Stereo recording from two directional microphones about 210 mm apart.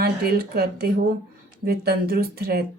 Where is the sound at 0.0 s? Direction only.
50° right (ahead or behind).